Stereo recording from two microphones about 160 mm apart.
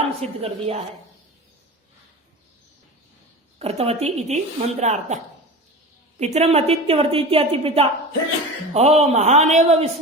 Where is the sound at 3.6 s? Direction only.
40° right (ahead or behind).